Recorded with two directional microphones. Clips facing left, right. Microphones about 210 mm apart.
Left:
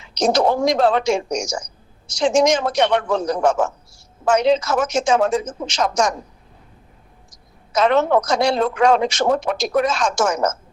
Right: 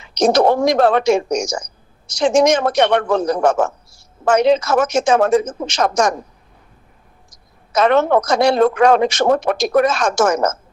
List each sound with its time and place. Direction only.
0.0 s speech: 60° right (ahead or behind)
7.8 s speech: 60° right (ahead or behind)